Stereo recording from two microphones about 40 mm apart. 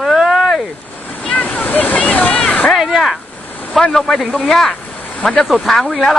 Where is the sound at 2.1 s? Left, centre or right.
Left.